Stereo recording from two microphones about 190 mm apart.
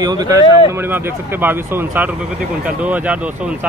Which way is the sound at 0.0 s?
20° right (ahead or behind).